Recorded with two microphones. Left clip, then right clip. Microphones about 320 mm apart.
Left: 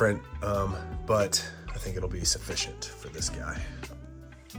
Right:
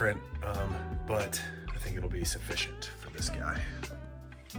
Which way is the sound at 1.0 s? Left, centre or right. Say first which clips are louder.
Left 8 dB; centre.